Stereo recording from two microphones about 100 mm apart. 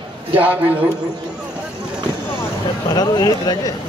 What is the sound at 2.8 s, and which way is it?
Speech, 40° left (ahead or behind).